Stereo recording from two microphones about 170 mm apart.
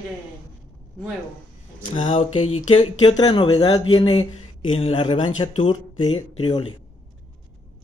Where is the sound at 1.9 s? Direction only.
35° left (ahead or behind).